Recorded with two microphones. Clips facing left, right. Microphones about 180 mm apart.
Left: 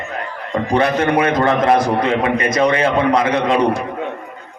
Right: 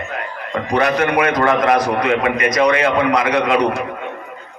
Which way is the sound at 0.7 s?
30° left (ahead or behind).